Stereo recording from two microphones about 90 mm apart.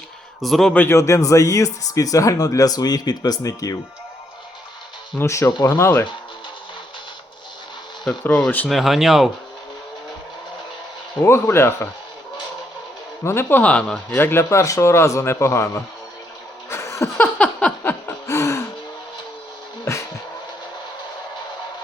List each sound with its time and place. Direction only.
0.4 s speech: centre (ahead or behind)
0.7 s speech: 20° left (ahead or behind)
0.9 s speech: 35° left (ahead or behind)
5.2 s speech: 35° left (ahead or behind)
8.4 s speech: 20° left (ahead or behind)
8.7 s speech: centre (ahead or behind)
11.2 s speech: 30° left (ahead or behind)
13.2 s speech: 25° left (ahead or behind); by 14.2 s 5° left (ahead or behind)
14.2 s speech: 25° left (ahead or behind)
16.6 s a sound: 30° left (ahead or behind)
17.2 s a sound: 15° left (ahead or behind)
17.8 s a sound: 30° left (ahead or behind)
19.8 s music: 30° left (ahead or behind)